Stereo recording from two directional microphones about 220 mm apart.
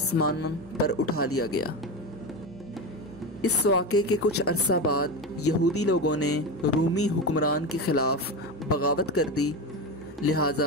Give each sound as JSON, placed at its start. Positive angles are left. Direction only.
{"t": 0.1, "sound": "speech", "side_deg": 85}
{"t": 3.4, "sound": "speech", "side_deg": 85}